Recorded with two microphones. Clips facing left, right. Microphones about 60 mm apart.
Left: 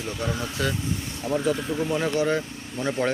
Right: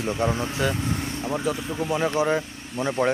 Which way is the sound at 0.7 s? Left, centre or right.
Right.